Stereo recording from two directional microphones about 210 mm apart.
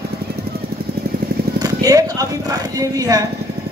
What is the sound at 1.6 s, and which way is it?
Speech, 15° right (ahead or behind).